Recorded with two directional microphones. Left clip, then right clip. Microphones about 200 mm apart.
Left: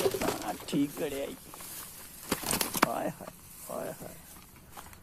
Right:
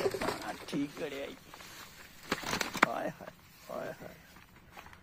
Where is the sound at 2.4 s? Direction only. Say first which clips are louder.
Left 2 dB; 5° left (ahead or behind).